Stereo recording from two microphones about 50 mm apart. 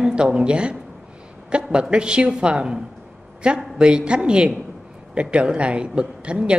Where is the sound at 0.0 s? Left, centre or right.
Centre.